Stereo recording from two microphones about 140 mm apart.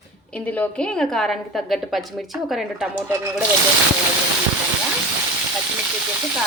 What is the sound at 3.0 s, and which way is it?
Speech, 20° right (ahead or behind).